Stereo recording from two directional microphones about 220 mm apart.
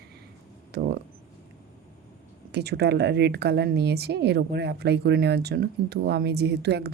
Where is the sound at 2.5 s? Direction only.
50° right (ahead or behind).